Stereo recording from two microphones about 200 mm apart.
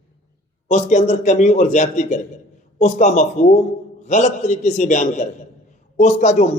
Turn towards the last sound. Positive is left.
turn(degrees=35)  # may be behind; listen again after turning